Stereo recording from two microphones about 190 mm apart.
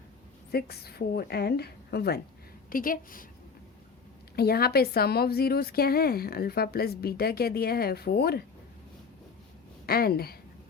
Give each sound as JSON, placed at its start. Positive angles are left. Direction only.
{"t": 0.5, "sound": "a woman's voice", "side_deg": 55}
{"t": 2.6, "sound": "a woman's voice", "side_deg": 45}
{"t": 4.4, "sound": "a woman's voice", "side_deg": 55}
{"t": 9.8, "sound": "a woman's voice", "side_deg": 55}